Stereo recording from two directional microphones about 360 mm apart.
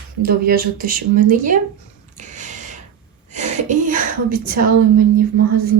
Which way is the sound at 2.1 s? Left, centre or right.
Centre.